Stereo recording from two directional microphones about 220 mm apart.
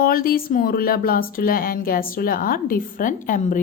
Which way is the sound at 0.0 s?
40° left (ahead or behind).